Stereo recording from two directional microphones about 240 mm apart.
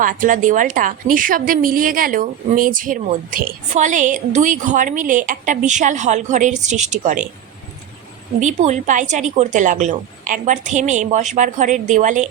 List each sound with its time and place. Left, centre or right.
0.0 s a woman's voice: right
8.4 s a woman's voice: right